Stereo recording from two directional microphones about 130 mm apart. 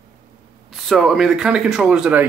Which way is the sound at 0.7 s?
Centre (ahead or behind).